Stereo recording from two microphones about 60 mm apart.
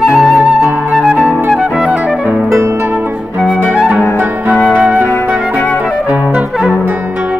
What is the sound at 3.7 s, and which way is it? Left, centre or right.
Flute, centre.